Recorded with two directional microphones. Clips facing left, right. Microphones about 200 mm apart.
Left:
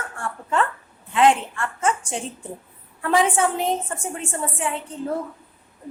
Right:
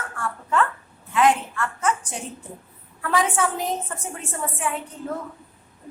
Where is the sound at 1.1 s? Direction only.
25° left (ahead or behind).